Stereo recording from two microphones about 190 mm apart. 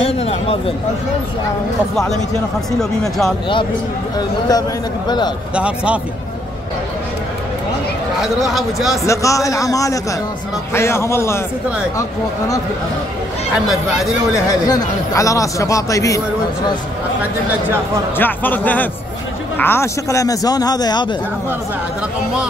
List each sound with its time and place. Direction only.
0.0 s speech: 30° left (ahead or behind)
2.8 s speech: centre (ahead or behind)
4.5 s a man's voice: 20° left (ahead or behind)
5.5 s speech: 5° right (ahead or behind)
8.2 s speech: centre (ahead or behind)
9.0 s speech: 15° left (ahead or behind)
13.7 s speech: centre (ahead or behind)
14.7 s speech: 15° left (ahead or behind)
18.1 s a man's voice: 10° left (ahead or behind)